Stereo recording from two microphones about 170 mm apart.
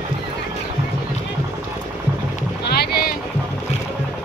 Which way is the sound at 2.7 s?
70° left (ahead or behind).